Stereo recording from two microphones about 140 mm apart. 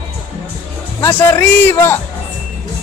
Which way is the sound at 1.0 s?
15° left (ahead or behind).